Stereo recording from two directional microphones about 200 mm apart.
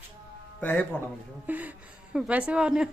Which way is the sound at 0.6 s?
5° left (ahead or behind).